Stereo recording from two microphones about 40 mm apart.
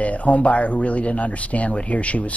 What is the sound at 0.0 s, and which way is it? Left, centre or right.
Speech, left.